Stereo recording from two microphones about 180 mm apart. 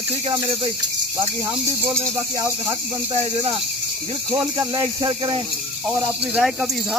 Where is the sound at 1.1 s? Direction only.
15° right (ahead or behind).